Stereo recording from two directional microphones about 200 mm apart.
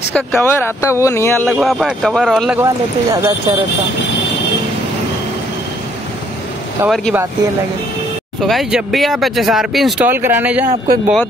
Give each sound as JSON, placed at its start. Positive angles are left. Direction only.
{"t": 0.1, "sound": "speech", "side_deg": 5}
{"t": 1.6, "sound": "speech", "side_deg": 0}
{"t": 2.6, "sound": "speech", "side_deg": -15}
{"t": 8.4, "sound": "speech", "side_deg": 0}